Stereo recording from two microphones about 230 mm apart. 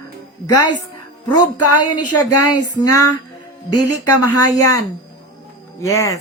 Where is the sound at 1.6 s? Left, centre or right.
Left.